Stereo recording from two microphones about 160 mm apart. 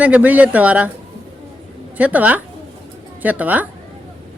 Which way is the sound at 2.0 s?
10° right (ahead or behind).